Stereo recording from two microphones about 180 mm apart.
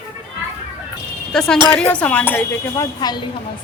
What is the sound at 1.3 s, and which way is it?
Speech, 5° left (ahead or behind).